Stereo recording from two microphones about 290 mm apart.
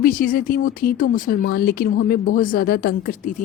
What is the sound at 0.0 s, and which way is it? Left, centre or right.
Speech, left.